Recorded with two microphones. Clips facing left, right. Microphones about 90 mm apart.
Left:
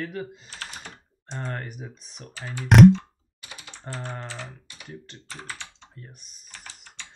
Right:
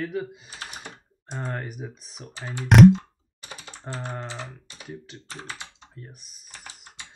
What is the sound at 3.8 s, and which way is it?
Speech, 15° right (ahead or behind).